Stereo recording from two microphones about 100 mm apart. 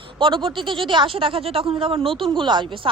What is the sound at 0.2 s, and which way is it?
A woman's voice, 55° right (ahead or behind).